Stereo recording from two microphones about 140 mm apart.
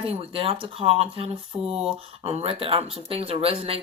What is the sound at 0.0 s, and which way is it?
Speech, 40° right (ahead or behind).